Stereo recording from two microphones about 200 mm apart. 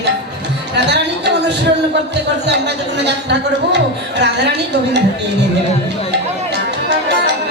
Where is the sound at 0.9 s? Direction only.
60° right (ahead or behind).